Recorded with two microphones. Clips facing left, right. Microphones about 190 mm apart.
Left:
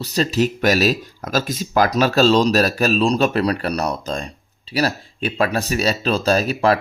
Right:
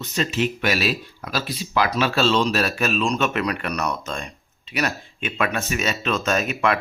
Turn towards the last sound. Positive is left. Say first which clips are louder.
# left 5 dB
turn(degrees=35)  # may be behind; listen again after turning